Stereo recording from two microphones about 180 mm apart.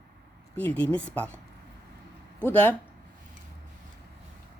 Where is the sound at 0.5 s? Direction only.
10° left (ahead or behind).